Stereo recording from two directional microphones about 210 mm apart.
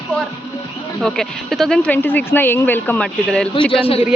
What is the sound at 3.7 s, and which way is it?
Speech, 25° left (ahead or behind).